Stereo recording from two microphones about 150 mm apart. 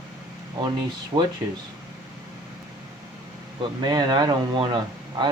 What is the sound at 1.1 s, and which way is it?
Speech, 25° right (ahead or behind).